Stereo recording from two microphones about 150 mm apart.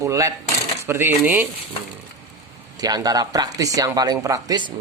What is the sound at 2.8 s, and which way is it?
Speech, 25° right (ahead or behind).